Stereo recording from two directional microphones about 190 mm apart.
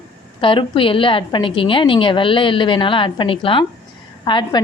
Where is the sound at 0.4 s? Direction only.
25° left (ahead or behind).